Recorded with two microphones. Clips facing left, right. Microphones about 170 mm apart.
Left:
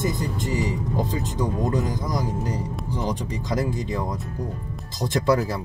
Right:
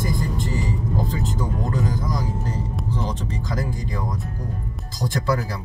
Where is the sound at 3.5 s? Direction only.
20° left (ahead or behind).